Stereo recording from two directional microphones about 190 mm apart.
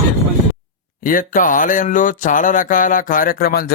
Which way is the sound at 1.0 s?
45° left (ahead or behind).